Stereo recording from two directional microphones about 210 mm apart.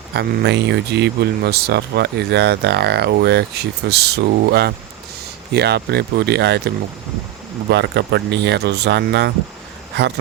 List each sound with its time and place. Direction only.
0.1 s speech: 55° right (ahead or behind)